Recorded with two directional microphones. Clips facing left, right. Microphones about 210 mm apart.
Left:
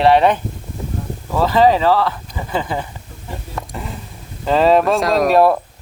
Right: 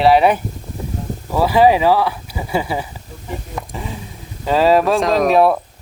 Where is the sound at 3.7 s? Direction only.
Centre (ahead or behind).